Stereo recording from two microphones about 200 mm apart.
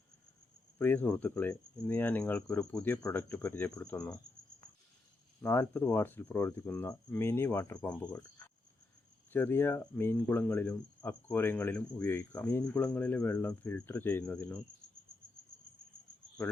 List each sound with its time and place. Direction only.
0.8 s speech: 10° left (ahead or behind)
5.4 s speech: 10° left (ahead or behind)
8.0 s speech: 20° left (ahead or behind)